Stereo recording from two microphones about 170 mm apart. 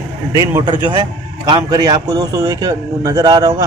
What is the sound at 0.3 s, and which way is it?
A man's voice, 20° right (ahead or behind).